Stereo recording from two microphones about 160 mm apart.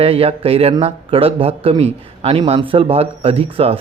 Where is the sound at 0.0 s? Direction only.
35° right (ahead or behind).